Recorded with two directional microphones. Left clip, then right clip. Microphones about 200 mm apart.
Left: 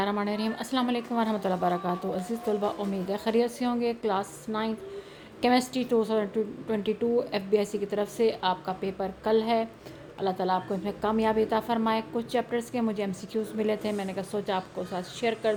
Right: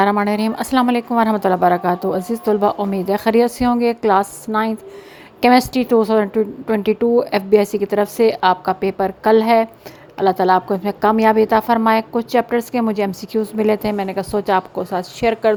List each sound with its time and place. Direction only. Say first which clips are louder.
0.0 s a woman's voice: right 13 dB; 40° right (ahead or behind)